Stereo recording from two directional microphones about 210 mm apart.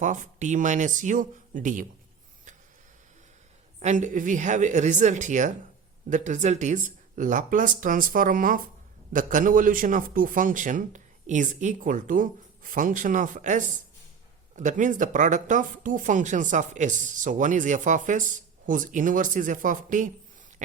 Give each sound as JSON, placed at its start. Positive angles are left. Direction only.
{"t": 0.0, "sound": "speech", "side_deg": -35}
{"t": 3.8, "sound": "speech", "side_deg": -35}